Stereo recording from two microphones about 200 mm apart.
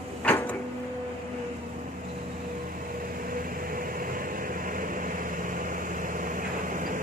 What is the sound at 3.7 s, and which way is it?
Vehicle, 45° right (ahead or behind).